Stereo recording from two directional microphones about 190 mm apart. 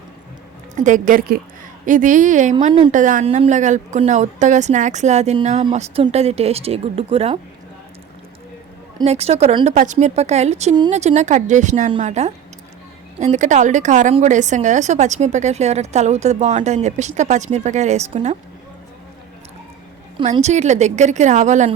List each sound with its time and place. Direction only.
0.8 s a woman's voice: 40° right (ahead or behind)
9.0 s a woman's voice: 35° right (ahead or behind)
20.3 s a woman's voice: 35° right (ahead or behind)